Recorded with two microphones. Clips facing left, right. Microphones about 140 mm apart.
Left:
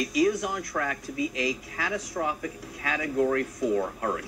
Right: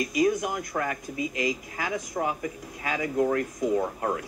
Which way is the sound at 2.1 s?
15° right (ahead or behind).